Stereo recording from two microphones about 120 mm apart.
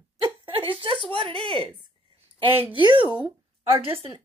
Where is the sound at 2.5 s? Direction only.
15° right (ahead or behind).